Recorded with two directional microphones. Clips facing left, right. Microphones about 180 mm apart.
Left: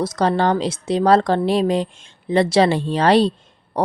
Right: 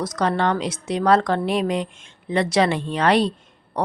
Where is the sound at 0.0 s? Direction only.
30° left (ahead or behind).